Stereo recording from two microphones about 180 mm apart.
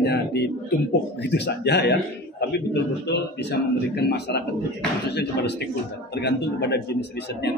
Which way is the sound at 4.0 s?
65° left (ahead or behind).